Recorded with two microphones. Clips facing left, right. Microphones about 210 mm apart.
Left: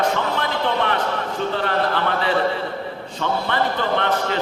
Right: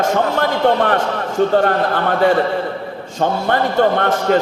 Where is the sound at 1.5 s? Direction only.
45° right (ahead or behind).